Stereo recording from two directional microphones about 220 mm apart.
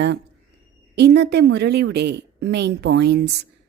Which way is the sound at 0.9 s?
50° right (ahead or behind).